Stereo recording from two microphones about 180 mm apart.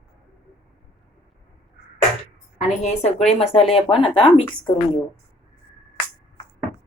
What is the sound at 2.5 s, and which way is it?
Speech, 40° left (ahead or behind).